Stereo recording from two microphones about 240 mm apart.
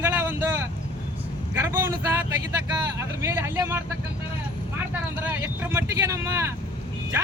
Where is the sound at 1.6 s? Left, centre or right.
Centre.